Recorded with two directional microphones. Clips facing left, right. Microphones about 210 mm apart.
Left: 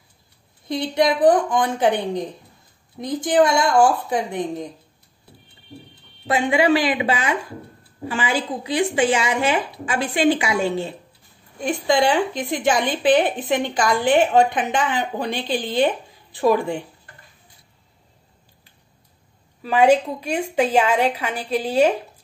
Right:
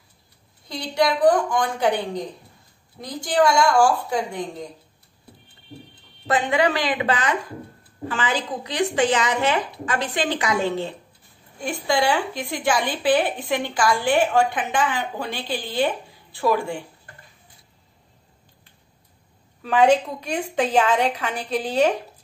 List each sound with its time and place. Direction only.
0.7 s speech: 20° left (ahead or behind)
6.2 s a woman's voice: 10° left (ahead or behind)
19.6 s a woman's voice: 5° left (ahead or behind)